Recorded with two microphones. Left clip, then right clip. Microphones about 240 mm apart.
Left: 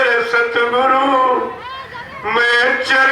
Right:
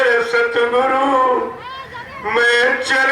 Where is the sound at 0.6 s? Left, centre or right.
Left.